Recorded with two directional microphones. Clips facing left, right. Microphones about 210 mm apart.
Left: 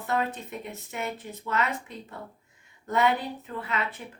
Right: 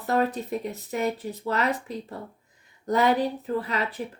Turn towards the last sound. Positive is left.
turn(degrees=-35)  # may be behind; listen again after turning